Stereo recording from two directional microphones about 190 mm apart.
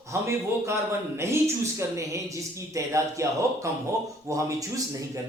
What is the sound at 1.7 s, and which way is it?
A woman's voice, 15° right (ahead or behind).